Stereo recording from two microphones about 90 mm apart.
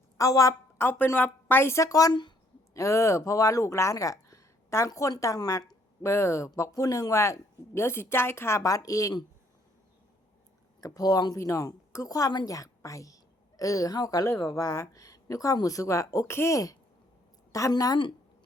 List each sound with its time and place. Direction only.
0.2 s speech: 40° left (ahead or behind)
0.8 s a woman's voice: 25° left (ahead or behind); by 9.1 s 40° left (ahead or behind)
10.8 s a woman's voice: 40° left (ahead or behind)